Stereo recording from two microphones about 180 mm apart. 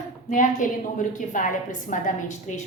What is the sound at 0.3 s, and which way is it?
A woman's voice, 45° left (ahead or behind).